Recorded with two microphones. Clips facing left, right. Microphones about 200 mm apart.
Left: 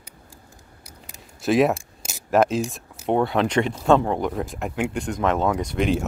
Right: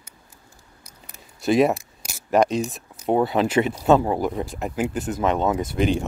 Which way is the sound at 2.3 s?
Centre (ahead or behind).